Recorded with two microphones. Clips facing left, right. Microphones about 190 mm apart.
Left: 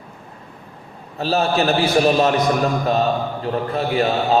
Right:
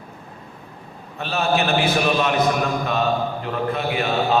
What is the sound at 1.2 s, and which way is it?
A man's voice, 35° left (ahead or behind).